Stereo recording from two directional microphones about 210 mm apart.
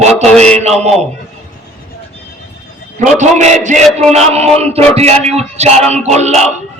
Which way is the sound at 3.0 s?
35° right (ahead or behind).